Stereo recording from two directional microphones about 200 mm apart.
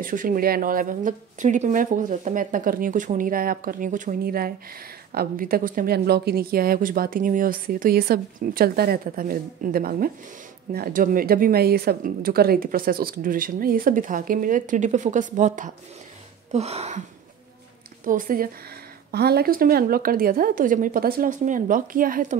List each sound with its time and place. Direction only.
0.0 s speech: 40° right (ahead or behind)
16.5 s a sound: 30° right (ahead or behind)
18.0 s speech: 45° right (ahead or behind)